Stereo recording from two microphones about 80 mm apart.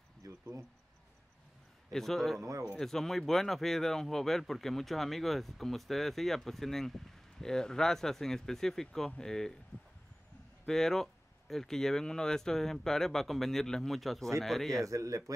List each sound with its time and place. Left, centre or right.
0.2 s a sound: right
1.9 s speech: centre
2.4 s speech: right
2.8 s speech: centre
10.6 s speech: centre
14.9 s a man's voice: right